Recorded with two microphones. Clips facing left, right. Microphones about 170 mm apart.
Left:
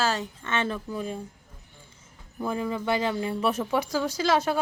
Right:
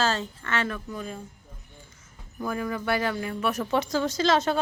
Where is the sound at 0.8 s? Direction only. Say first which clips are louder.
Left 3 dB; 5° left (ahead or behind).